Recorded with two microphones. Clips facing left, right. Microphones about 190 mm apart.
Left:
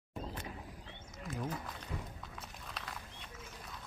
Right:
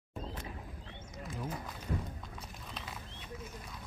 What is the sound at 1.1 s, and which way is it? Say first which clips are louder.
Speech: left 1 dB; centre (ahead or behind).